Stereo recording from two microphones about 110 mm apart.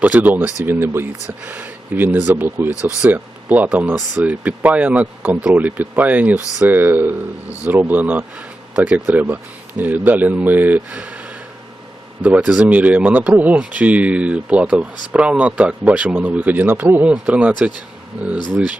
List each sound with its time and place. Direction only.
0.0 s speech: 15° right (ahead or behind)
12.2 s speech: 10° right (ahead or behind)